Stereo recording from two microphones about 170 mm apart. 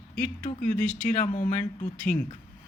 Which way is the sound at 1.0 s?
45° left (ahead or behind).